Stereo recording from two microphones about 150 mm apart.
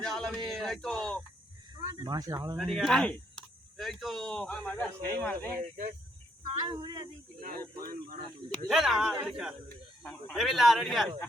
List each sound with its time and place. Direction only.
0.0 s speech: 5° left (ahead or behind)
1.7 s speech: 25° right (ahead or behind)
2.6 s speech: centre (ahead or behind)
6.7 s speech: 25° right (ahead or behind)
7.4 s speech: 75° right (ahead or behind)
8.7 s speech: centre (ahead or behind)